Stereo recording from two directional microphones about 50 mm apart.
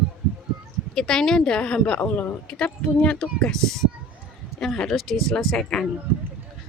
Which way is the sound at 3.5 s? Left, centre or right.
Centre.